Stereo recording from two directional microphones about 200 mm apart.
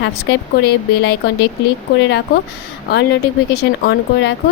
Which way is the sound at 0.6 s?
55° left (ahead or behind).